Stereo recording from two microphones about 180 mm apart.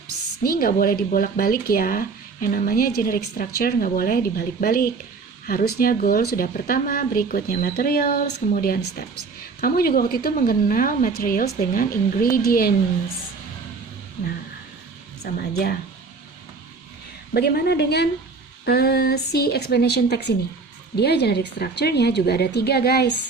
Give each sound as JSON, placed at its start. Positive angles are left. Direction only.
{"t": 0.4, "sound": "speech", "side_deg": 55}
{"t": 15.4, "sound": "speech", "side_deg": 60}
{"t": 17.3, "sound": "speech", "side_deg": 60}